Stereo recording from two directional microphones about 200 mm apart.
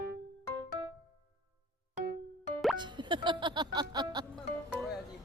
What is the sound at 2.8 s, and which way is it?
Music, 25° right (ahead or behind).